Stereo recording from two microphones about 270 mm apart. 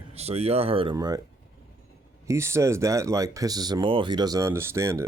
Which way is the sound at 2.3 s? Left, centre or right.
Centre.